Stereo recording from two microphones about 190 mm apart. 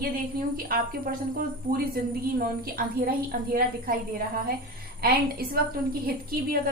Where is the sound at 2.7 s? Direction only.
50° right (ahead or behind).